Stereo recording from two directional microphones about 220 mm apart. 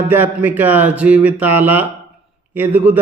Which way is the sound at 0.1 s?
10° right (ahead or behind).